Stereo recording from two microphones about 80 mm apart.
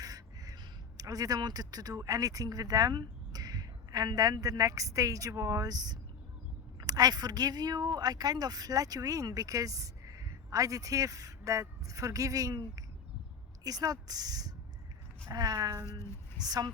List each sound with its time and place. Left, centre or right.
0.0 s speech: right
15.9 s speech: left
16.5 s speech: right